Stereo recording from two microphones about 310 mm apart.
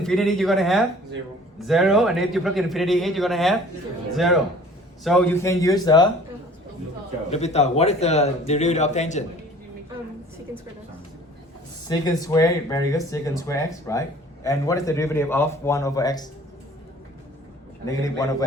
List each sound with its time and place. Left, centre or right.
0.0 s a man's voice: centre
7.3 s speech: left
11.9 s speech: centre
17.8 s speech: centre